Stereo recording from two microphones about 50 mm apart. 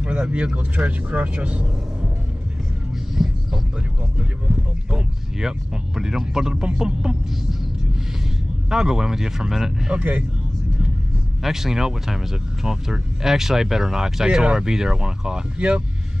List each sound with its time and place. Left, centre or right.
0.0 s speech: right
3.2 s music: centre
5.9 s speech: centre
8.6 s speech: centre
9.9 s speech: right
11.4 s speech: centre